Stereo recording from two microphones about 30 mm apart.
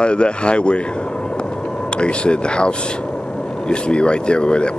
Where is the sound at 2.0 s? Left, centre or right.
Left.